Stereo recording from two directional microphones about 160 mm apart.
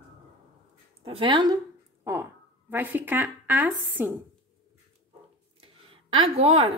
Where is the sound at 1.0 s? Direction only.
35° right (ahead or behind).